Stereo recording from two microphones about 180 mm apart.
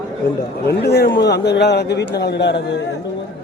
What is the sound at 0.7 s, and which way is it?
A man's voice, 65° left (ahead or behind).